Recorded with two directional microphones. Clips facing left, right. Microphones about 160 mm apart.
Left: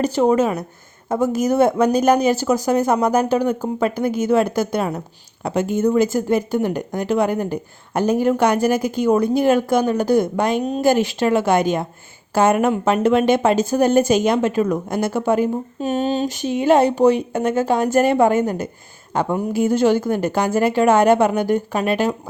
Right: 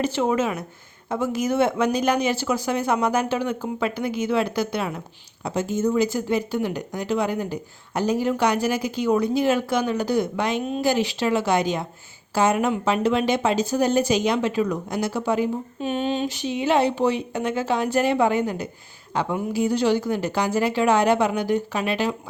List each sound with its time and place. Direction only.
0.0 s speech: 40° left (ahead or behind)